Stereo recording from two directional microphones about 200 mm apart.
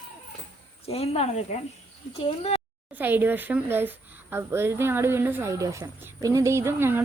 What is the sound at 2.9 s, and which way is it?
Speech, 10° right (ahead or behind).